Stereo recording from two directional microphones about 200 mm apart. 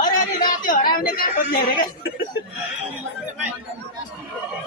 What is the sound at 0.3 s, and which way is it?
Speech, 45° left (ahead or behind).